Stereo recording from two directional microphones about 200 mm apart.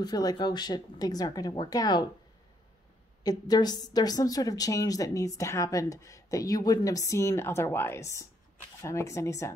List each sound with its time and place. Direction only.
0.0 s speech: 20° left (ahead or behind)
3.3 s a woman's voice: 20° left (ahead or behind)